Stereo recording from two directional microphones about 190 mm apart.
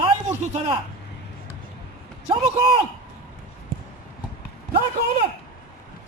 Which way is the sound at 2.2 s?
30° right (ahead or behind).